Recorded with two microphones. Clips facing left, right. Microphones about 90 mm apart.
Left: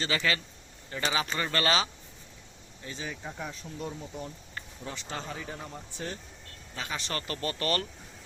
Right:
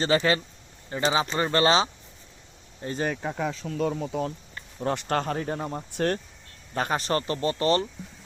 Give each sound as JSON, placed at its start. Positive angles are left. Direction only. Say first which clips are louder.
{"t": 0.0, "sound": "speech", "louder": "right 7 dB", "side_deg": -35}
{"t": 2.8, "sound": "speech", "louder": "right 11 dB", "side_deg": -50}
{"t": 3.1, "sound": "speech", "louder": "right 9 dB", "side_deg": -75}
{"t": 4.8, "sound": "speech", "louder": "right 13 dB", "side_deg": -60}
{"t": 6.7, "sound": "speech", "louder": "right 10 dB", "side_deg": -50}